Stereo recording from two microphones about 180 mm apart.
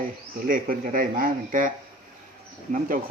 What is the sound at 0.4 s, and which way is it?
Speech, 50° right (ahead or behind).